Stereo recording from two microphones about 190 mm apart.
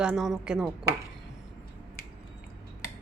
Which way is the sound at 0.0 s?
5° right (ahead or behind).